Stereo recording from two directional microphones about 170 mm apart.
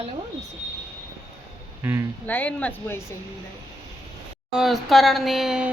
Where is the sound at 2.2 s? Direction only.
10° left (ahead or behind).